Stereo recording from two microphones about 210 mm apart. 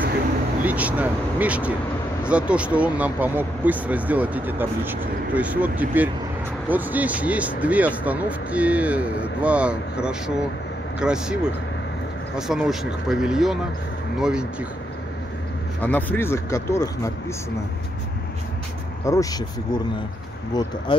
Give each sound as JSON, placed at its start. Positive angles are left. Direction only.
{"t": 0.7, "sound": "speech", "side_deg": -5}
{"t": 15.8, "sound": "speech", "side_deg": 10}
{"t": 19.0, "sound": "speech", "side_deg": 15}